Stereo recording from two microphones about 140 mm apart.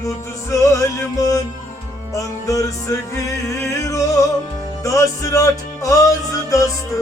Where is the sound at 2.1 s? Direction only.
25° left (ahead or behind).